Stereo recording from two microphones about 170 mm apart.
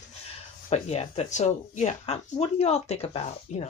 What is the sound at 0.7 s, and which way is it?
Speech, 40° left (ahead or behind).